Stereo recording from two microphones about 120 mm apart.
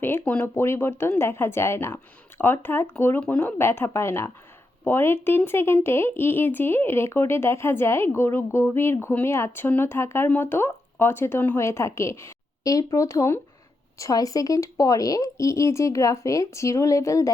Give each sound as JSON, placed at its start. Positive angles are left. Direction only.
{"t": 0.0, "sound": "speech", "side_deg": 20}